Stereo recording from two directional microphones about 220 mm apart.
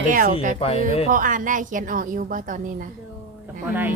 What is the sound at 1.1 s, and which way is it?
A woman's voice, 35° right (ahead or behind).